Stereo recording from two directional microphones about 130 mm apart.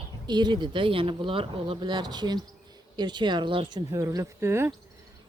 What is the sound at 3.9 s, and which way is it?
Speech, 25° right (ahead or behind).